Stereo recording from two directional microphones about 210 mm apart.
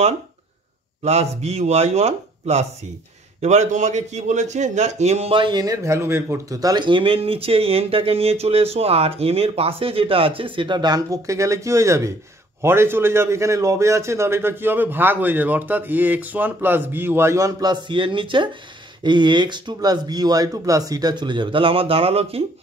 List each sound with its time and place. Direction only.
1.0 s a man's voice: 30° right (ahead or behind)